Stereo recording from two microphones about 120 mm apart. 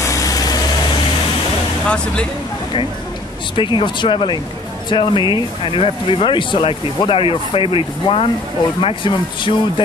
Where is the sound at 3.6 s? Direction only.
45° left (ahead or behind).